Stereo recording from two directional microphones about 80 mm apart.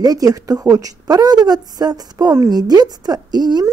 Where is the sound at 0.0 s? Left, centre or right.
Right.